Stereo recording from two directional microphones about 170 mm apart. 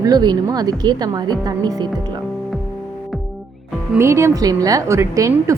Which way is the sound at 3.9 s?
15° right (ahead or behind).